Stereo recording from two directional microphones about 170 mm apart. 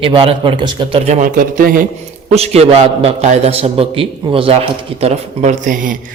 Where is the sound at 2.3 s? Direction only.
35° right (ahead or behind).